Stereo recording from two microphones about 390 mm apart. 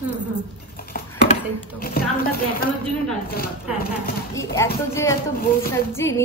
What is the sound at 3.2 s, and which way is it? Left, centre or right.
Speech, left.